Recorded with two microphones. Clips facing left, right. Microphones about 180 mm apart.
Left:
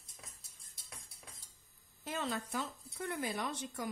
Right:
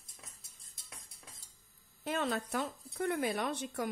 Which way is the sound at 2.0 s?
65° right (ahead or behind).